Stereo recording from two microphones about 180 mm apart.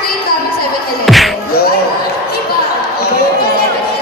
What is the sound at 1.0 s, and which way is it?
Music, centre (ahead or behind).